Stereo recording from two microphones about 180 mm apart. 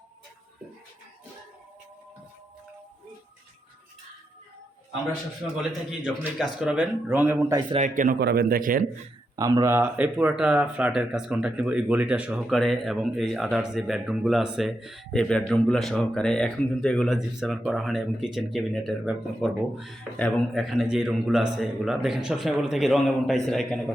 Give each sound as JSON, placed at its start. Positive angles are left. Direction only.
{"t": 6.4, "sound": "speech", "side_deg": -5}
{"t": 7.7, "sound": "a man's voice", "side_deg": -45}
{"t": 8.2, "sound": "speech", "side_deg": -65}
{"t": 9.3, "sound": "speech", "side_deg": -20}